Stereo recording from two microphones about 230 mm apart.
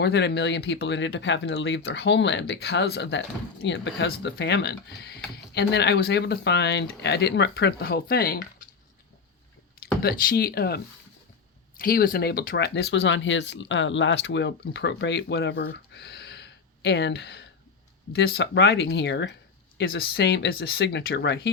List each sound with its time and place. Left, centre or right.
0.0 s speech: left
10.0 s speech: left
11.8 s speech: left